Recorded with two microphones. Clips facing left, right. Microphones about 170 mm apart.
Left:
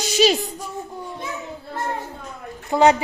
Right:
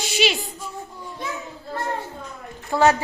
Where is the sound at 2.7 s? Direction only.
20° left (ahead or behind).